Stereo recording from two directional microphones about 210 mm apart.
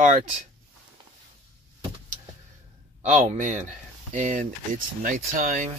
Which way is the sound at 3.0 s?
35° right (ahead or behind).